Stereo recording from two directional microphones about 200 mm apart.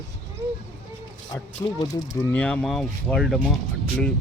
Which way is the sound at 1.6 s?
15° left (ahead or behind).